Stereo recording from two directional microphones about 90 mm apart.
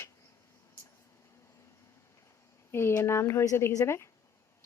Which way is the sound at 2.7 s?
30° left (ahead or behind).